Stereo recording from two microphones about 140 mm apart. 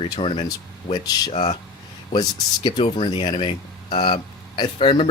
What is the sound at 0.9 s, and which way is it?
Speech, 30° left (ahead or behind).